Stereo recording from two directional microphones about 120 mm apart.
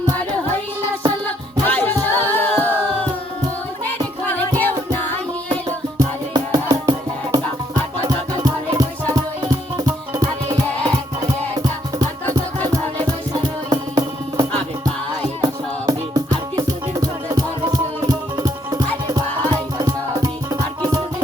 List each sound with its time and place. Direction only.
1.6 s music: 15° left (ahead or behind)
6.0 s music: 30° right (ahead or behind)
13.7 s music: 35° right (ahead or behind)
15.9 s music: 30° right (ahead or behind)